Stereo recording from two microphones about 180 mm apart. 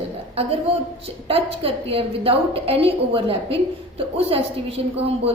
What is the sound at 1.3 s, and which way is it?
A woman's voice, 30° right (ahead or behind).